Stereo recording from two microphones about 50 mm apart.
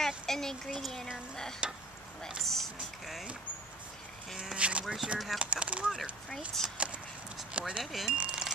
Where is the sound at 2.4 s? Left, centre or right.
Centre.